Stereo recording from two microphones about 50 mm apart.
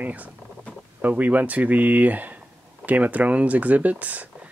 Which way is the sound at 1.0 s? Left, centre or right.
Right.